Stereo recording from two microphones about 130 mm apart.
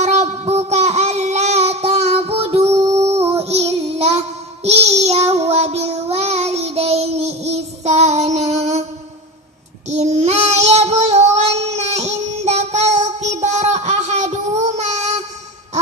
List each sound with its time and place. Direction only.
0.0 s child singing: 55° right (ahead or behind)
9.9 s child singing: 60° right (ahead or behind)